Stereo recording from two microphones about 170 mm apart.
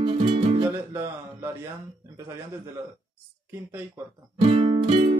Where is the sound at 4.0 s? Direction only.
15° right (ahead or behind).